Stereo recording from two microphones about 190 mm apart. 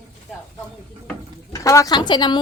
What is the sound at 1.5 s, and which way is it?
Speech, 15° left (ahead or behind).